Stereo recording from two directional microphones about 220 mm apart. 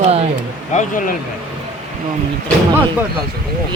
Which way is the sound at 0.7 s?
35° left (ahead or behind).